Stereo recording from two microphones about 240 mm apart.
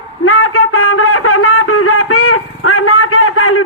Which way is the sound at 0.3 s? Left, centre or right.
Left.